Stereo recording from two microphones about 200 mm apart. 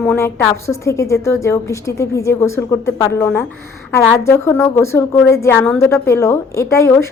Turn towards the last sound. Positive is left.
turn(degrees=15)  # may be behind; listen again after turning